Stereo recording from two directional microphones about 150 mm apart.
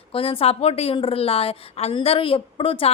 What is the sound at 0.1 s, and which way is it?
A woman's voice, 40° left (ahead or behind).